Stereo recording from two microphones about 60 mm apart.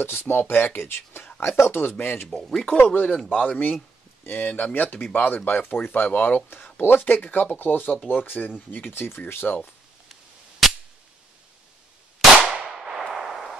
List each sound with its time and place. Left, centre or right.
0.0 s speech: left
2.4 s speech: centre
2.8 s speech: left
12.4 s a sound: centre
13.1 s artillery fire: centre